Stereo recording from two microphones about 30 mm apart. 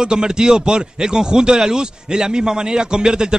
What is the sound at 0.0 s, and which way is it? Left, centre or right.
A man's voice, right.